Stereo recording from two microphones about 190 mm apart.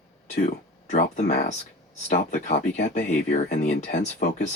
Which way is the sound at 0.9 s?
40° left (ahead or behind).